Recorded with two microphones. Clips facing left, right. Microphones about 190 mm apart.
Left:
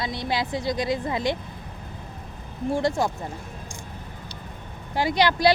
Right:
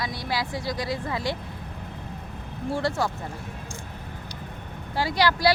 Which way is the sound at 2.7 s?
15° left (ahead or behind).